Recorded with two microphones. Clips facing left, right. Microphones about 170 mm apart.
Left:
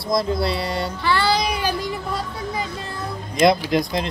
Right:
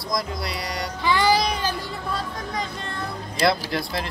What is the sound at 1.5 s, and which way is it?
Music, 15° left (ahead or behind).